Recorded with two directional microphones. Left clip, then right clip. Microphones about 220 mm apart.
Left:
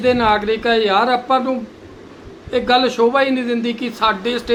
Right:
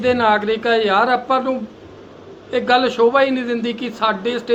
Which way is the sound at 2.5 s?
35° left (ahead or behind).